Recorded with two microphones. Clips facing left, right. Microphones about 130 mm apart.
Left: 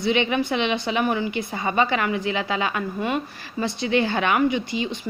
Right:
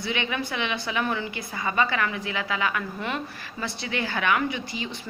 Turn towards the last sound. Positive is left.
turn(degrees=20)  # may be behind; listen again after turning